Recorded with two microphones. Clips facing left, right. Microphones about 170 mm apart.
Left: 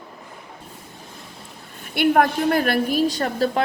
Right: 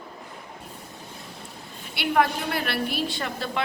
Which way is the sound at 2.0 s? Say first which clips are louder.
Left 6 dB; 50° left (ahead or behind).